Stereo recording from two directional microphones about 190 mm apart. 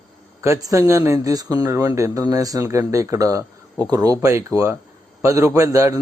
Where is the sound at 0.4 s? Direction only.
15° right (ahead or behind).